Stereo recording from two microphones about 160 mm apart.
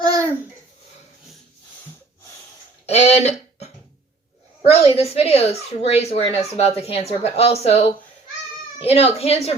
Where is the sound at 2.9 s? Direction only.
40° left (ahead or behind).